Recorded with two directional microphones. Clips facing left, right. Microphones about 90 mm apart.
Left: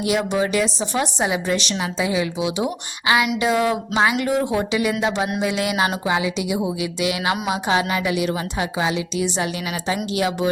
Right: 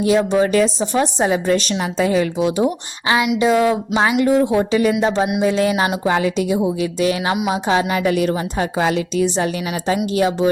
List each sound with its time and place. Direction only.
0.3 s a woman's voice: 35° right (ahead or behind)
6.1 s a woman's voice: 45° right (ahead or behind)
8.8 s speech: 50° right (ahead or behind)